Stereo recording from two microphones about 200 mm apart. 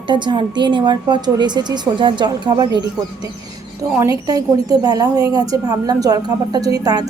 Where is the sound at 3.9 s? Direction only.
15° right (ahead or behind).